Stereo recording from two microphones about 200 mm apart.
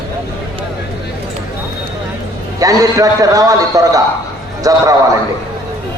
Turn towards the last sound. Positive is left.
turn(degrees=-15)  # may be behind; listen again after turning